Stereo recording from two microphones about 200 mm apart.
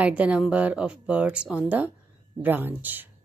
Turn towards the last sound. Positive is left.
turn(degrees=-10)  # may be behind; listen again after turning